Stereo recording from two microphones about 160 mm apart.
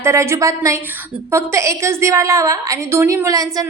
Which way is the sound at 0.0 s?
15° right (ahead or behind).